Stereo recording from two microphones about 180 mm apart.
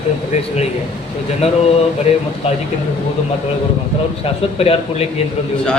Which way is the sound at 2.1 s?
35° left (ahead or behind).